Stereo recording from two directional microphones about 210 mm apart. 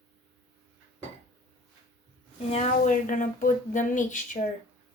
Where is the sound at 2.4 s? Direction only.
30° left (ahead or behind).